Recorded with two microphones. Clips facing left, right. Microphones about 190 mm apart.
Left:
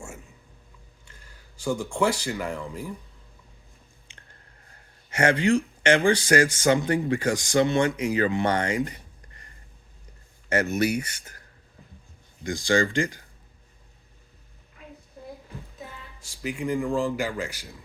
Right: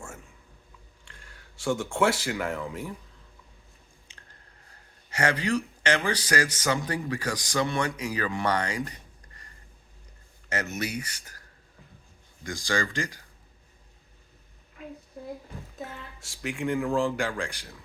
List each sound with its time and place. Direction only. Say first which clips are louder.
1.6 s a man's voice: even; centre (ahead or behind)
5.1 s speech: left 5 dB; 25° left (ahead or behind)
10.8 s speech: left 8 dB; 30° left (ahead or behind)
12.4 s speech: left 6 dB; 25° left (ahead or behind)
16.2 s a man's voice: left 1 dB; centre (ahead or behind)